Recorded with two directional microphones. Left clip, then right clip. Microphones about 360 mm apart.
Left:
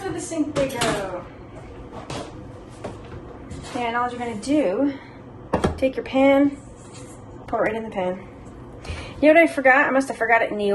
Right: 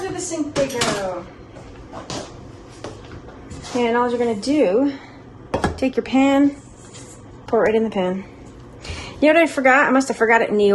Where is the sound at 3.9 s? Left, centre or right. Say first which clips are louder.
Right 6 dB; right.